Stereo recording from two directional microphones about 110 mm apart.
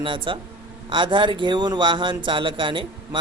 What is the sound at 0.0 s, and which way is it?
Speech, 50° right (ahead or behind).